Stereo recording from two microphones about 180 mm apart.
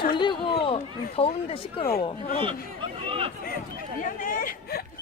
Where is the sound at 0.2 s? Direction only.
25° left (ahead or behind).